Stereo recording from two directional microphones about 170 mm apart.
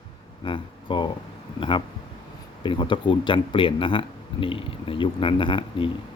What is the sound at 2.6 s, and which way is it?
Speech, 30° left (ahead or behind).